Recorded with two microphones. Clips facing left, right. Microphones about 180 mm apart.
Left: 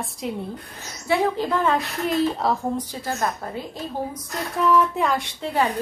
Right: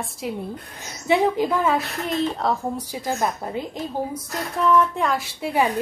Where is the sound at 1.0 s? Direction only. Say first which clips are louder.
Right 2 dB; 15° right (ahead or behind).